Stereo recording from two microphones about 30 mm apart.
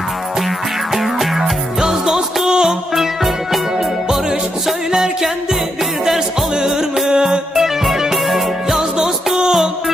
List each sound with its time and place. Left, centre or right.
0.9 s music: centre
1.8 s music: centre
2.9 s music: centre
4.9 s music: centre
7.5 s music: centre